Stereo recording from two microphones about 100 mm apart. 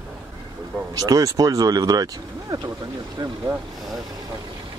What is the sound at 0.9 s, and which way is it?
Speech, 35° right (ahead or behind).